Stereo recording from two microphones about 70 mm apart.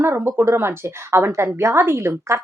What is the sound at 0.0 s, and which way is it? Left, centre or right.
Speech, right.